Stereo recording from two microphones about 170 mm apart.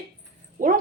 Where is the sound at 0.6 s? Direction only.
50° right (ahead or behind).